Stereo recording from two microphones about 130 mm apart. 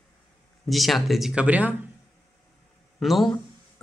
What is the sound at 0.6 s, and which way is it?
A man's voice, centre (ahead or behind).